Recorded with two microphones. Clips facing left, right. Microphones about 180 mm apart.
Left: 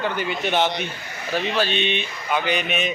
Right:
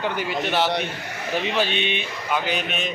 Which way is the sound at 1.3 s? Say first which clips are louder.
Left 1 dB; 15° right (ahead or behind).